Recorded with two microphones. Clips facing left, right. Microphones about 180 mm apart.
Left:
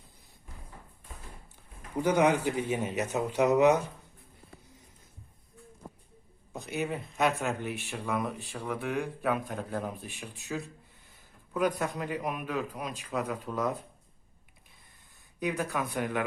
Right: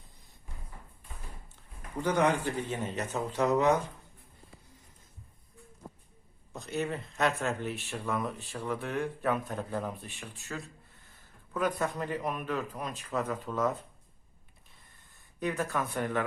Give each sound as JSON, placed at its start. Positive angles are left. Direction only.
{"t": 2.0, "sound": "a man's voice", "side_deg": 15}
{"t": 6.7, "sound": "speech", "side_deg": 0}
{"t": 7.2, "sound": "a man's voice", "side_deg": 15}
{"t": 8.5, "sound": "speech", "side_deg": 0}
{"t": 11.5, "sound": "a man's voice", "side_deg": 10}
{"t": 15.4, "sound": "a man's voice", "side_deg": 15}